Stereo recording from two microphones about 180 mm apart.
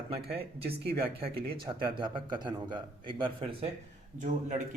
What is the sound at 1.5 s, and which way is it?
A man's voice, 25° right (ahead or behind).